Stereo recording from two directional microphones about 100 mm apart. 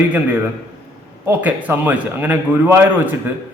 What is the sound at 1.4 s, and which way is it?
A man's voice, 15° right (ahead or behind).